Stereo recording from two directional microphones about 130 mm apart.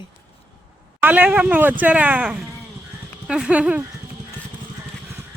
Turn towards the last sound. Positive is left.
turn(degrees=-10)  # may be behind; listen again after turning